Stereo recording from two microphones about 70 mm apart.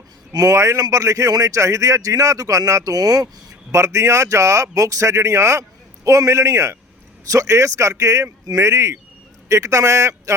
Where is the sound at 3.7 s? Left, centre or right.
Right.